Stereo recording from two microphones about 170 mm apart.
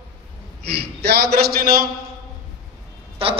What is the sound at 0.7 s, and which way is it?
A man's voice, 75° right (ahead or behind).